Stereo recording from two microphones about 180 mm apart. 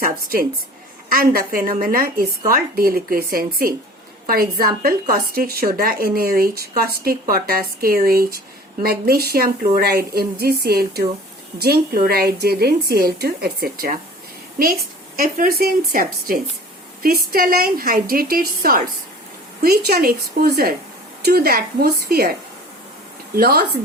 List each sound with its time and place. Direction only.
0.0 s a woman's voice: 55° right (ahead or behind)